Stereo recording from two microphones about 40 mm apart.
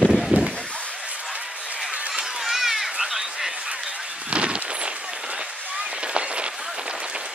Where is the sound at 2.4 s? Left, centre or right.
Centre.